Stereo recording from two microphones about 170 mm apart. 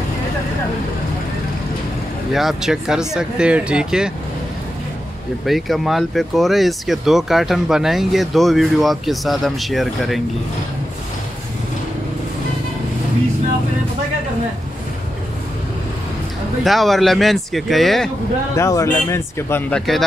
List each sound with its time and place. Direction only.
2.3 s speech: centre (ahead or behind)
5.4 s speech: centre (ahead or behind)
16.6 s speech: centre (ahead or behind)
18.6 s speech: 20° left (ahead or behind)